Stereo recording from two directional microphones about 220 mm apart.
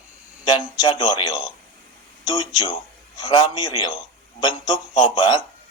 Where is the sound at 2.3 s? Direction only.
20° left (ahead or behind).